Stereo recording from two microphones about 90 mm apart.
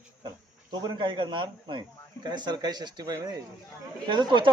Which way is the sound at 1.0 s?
65° right (ahead or behind).